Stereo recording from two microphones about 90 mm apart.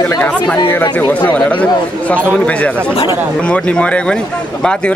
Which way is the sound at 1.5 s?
15° left (ahead or behind).